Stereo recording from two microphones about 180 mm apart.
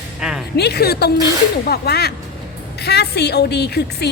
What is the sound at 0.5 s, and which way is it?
A woman's voice, 65° left (ahead or behind).